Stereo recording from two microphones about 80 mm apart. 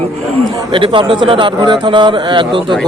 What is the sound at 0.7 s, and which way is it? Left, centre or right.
A man's voice, right.